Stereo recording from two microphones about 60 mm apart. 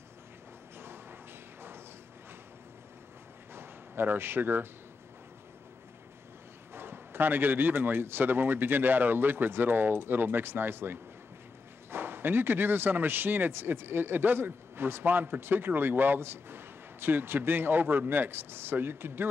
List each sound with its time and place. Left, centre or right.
0.7 s a sound: right
3.5 s a man's voice: right
6.7 s speech: right